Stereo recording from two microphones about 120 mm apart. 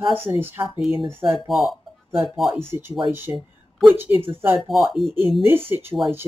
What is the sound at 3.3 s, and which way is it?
Speech, 30° right (ahead or behind).